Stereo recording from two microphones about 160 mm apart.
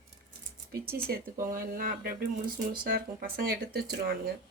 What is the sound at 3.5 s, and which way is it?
Speech, 80° right.